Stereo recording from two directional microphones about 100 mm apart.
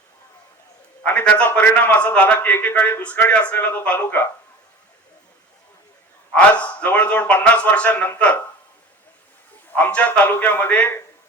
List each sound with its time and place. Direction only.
1.0 s a man's voice: 10° left (ahead or behind)
6.3 s a man's voice: 15° left (ahead or behind)
9.7 s a man's voice: 15° left (ahead or behind)